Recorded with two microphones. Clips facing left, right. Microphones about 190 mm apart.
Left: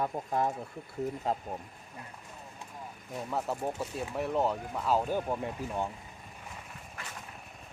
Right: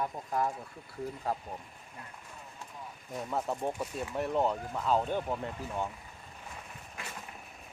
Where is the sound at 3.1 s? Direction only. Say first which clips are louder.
Even; centre (ahead or behind).